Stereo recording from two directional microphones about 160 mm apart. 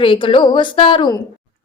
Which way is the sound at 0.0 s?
35° left (ahead or behind).